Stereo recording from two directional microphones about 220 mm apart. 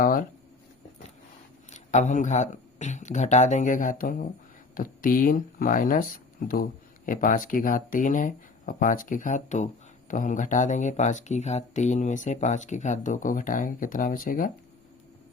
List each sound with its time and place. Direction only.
0.0 s speech: 40° left (ahead or behind)
1.7 s speech: 35° left (ahead or behind)